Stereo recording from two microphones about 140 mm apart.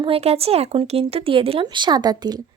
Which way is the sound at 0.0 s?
45° right (ahead or behind).